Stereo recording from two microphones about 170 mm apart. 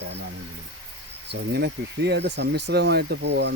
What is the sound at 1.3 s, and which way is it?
Speech, 80° right.